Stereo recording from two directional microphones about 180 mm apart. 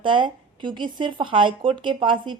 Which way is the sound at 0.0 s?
25° right (ahead or behind).